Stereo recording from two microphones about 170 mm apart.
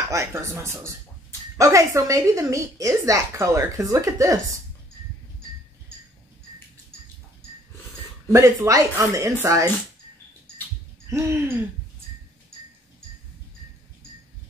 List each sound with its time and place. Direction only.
0.1 s a woman's voice: 15° right (ahead or behind)
8.3 s speech: 20° right (ahead or behind)
11.1 s speech: 15° right (ahead or behind)